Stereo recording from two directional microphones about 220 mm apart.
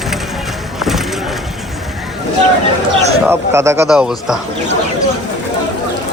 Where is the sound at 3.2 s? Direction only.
10° right (ahead or behind).